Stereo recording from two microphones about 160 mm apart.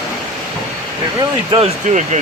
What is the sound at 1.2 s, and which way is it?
Speech, 35° right (ahead or behind).